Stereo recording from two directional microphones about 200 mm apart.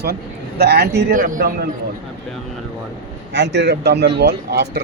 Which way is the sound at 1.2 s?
45° right (ahead or behind).